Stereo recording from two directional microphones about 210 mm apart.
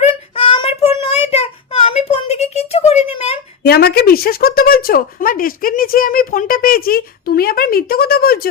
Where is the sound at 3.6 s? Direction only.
50° left (ahead or behind).